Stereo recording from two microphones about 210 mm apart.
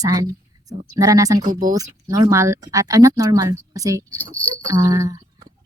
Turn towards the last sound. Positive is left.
turn(degrees=-15)  # may be behind; listen again after turning